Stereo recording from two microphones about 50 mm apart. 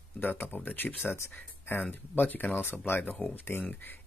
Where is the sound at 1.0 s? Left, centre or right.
Left.